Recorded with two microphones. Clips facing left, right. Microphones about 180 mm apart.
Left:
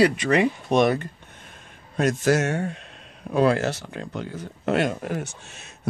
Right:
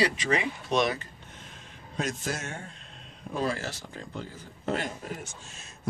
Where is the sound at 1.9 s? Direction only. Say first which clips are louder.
Left 12 dB; 70° left (ahead or behind).